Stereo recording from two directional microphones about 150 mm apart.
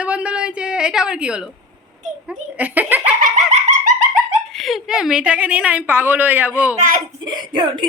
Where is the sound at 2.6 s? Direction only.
10° right (ahead or behind).